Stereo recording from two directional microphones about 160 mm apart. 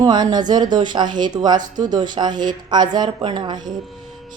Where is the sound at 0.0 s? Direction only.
25° right (ahead or behind).